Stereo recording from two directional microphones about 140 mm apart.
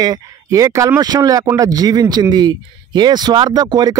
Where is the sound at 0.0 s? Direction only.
25° right (ahead or behind).